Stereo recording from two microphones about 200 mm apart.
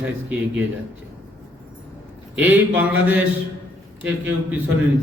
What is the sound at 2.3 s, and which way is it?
A man's voice, 10° right (ahead or behind).